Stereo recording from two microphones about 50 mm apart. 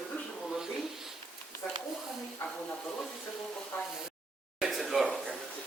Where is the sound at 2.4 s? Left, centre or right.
Left.